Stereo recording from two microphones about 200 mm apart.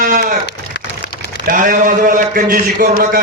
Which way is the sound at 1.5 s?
45° right (ahead or behind).